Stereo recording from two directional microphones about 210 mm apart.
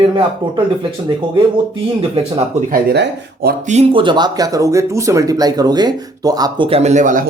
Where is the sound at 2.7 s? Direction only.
50° right (ahead or behind).